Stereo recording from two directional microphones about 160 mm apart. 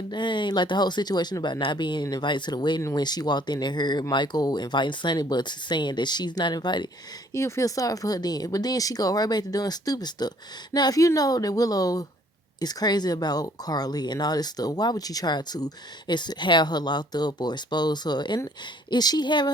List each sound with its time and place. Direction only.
0.1 s speech: 30° left (ahead or behind)